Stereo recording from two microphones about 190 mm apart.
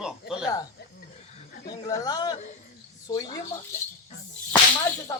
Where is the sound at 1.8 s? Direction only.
20° left (ahead or behind).